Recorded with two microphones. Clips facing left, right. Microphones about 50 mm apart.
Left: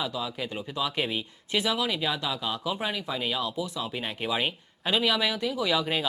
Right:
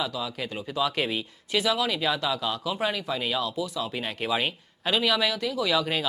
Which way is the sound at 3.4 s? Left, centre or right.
Centre.